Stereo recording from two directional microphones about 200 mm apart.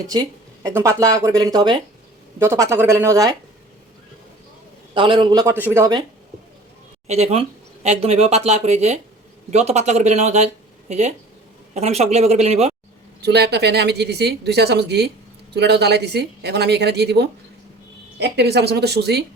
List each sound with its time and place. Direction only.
0.1 s speech: 15° right (ahead or behind)
4.9 s a man's voice: 25° right (ahead or behind)
7.1 s speech: 30° right (ahead or behind)
13.2 s speech: 55° right (ahead or behind)